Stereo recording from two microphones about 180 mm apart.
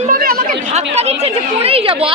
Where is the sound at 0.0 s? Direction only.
55° right (ahead or behind).